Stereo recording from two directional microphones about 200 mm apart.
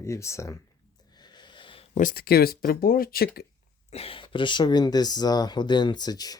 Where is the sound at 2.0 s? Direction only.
50° left (ahead or behind).